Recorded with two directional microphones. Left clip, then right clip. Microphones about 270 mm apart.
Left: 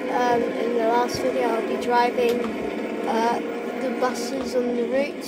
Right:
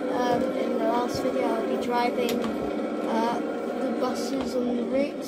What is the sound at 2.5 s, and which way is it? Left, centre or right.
Vehicle, left.